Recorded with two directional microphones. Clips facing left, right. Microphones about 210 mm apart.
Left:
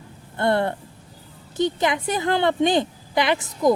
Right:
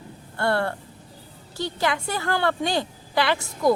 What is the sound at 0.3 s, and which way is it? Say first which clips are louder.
A woman's voice: left 3 dB; 20° left (ahead or behind).